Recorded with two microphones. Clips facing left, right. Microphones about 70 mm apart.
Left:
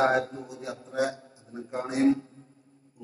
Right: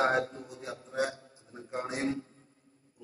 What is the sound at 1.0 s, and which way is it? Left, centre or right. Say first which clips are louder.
A man's voice: left 4 dB; left.